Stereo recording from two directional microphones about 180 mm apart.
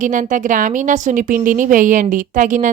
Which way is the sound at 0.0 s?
45° right (ahead or behind).